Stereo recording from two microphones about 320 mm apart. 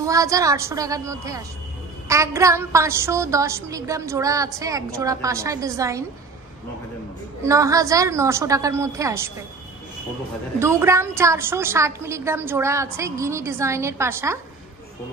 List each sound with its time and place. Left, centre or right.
0.0 s a woman's voice: centre
7.4 s a woman's voice: centre
10.6 s a woman's voice: centre